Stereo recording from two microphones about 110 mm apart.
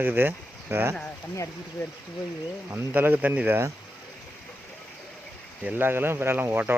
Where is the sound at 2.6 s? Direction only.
15° right (ahead or behind).